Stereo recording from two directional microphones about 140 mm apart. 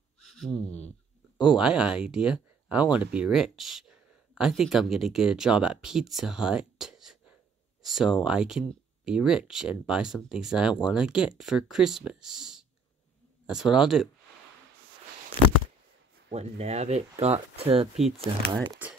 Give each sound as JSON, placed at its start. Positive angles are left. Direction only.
{"t": 0.2, "sound": "a sound", "side_deg": 0}
{"t": 1.6, "sound": "speech", "side_deg": -5}
{"t": 16.3, "sound": "speech", "side_deg": -50}
{"t": 17.9, "sound": "speech", "side_deg": 0}